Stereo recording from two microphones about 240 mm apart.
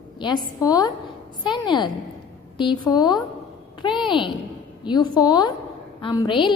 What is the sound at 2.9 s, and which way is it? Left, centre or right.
A woman's voice, centre.